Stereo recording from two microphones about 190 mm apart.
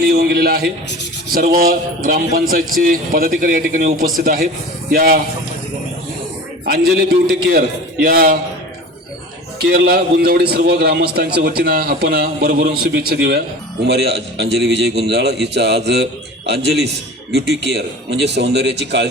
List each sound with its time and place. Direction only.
0.0 s a man's voice: 50° right (ahead or behind)
6.7 s a man's voice: 50° right (ahead or behind)
9.6 s a man's voice: 55° right (ahead or behind)